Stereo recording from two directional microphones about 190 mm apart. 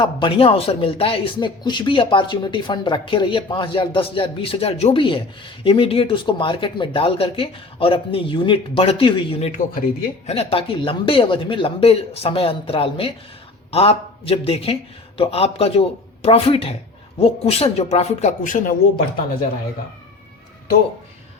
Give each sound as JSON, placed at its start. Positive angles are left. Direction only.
{"t": 0.0, "sound": "speech", "side_deg": 25}